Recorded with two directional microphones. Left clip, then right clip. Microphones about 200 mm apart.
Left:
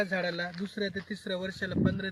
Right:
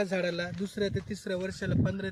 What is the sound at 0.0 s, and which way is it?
Speech, 45° right (ahead or behind).